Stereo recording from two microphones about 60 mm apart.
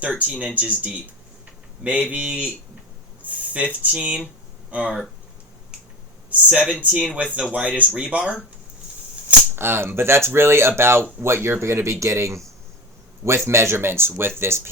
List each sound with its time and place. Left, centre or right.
0.0 s speech: right
5.7 s finger snapping: centre
6.5 s speech: centre
9.6 s speech: right